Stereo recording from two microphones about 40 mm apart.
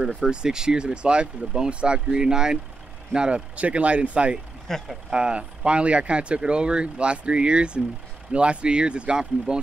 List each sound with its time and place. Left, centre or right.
0.0 s speech: right
3.3 s speech: right
4.7 s speech: centre
5.1 s speech: right